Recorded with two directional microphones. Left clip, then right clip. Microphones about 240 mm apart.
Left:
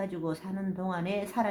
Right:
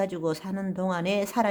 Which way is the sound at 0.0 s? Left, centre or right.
Right.